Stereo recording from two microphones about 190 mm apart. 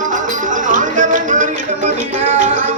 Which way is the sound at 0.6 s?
40° right (ahead or behind).